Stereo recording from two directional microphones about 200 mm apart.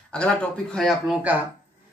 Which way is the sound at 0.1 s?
5° left (ahead or behind).